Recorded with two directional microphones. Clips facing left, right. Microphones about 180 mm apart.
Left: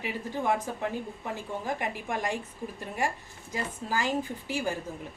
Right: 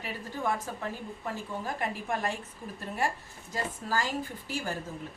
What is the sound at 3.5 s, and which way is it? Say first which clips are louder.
A woman's voice: even; 15° left (ahead or behind).